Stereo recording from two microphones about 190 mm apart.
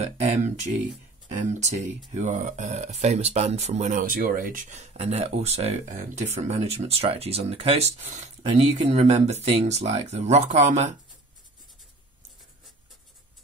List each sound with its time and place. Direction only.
0.0 s speech: 35° right (ahead or behind)